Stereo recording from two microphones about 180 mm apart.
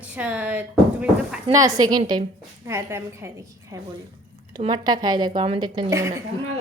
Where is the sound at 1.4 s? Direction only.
20° right (ahead or behind).